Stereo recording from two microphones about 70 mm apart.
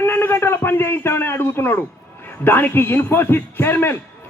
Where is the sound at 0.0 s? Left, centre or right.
Left.